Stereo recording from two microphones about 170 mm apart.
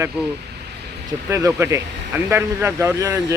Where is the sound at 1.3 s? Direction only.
15° right (ahead or behind).